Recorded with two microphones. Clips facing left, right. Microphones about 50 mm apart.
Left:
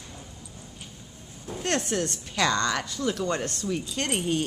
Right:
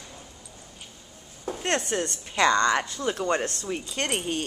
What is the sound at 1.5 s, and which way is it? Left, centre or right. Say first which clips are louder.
A woman's voice: right 1 dB; centre.